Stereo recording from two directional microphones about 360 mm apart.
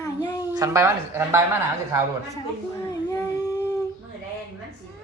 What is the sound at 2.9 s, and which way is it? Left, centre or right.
Dog, centre.